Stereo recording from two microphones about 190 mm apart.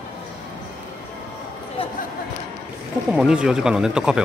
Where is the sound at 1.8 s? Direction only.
30° left (ahead or behind).